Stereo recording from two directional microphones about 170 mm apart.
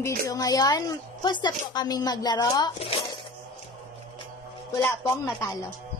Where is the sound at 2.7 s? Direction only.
35° left (ahead or behind).